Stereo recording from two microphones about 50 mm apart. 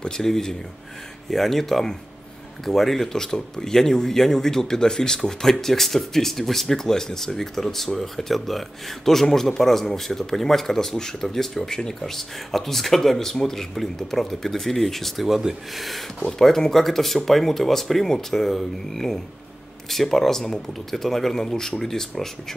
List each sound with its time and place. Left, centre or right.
0.0 s speech: centre
15.2 s speech: centre